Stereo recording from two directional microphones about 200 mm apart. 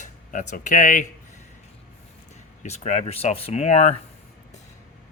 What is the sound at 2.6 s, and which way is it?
Speech, 35° left (ahead or behind).